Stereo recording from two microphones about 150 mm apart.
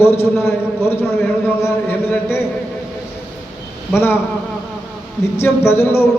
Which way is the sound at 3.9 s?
15° left (ahead or behind).